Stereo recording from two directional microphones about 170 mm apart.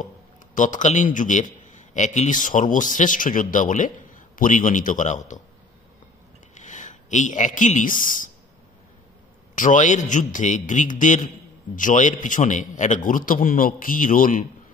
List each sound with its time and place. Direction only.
0.6 s a man's voice: 50° left (ahead or behind)
6.5 s speech: 45° left (ahead or behind)
9.6 s a man's voice: 45° left (ahead or behind)